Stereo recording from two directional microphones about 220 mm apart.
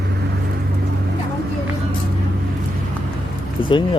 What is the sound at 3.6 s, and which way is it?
Speech, 20° left (ahead or behind).